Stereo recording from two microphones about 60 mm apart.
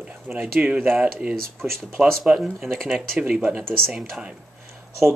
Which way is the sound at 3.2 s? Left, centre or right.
Right.